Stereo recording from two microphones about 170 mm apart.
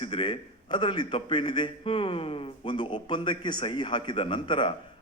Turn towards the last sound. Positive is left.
turn(degrees=30)  # may be behind; listen again after turning